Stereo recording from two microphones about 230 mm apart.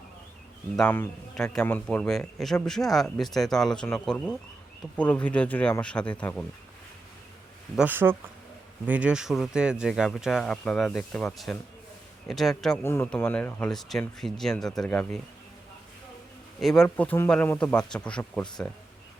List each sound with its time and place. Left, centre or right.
0.8 s a man's voice: centre
7.8 s a man's voice: centre
16.6 s a man's voice: centre